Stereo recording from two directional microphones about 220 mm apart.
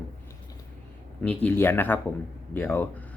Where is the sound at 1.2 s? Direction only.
5° left (ahead or behind).